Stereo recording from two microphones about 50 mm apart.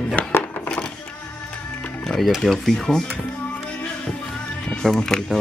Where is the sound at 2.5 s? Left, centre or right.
Centre.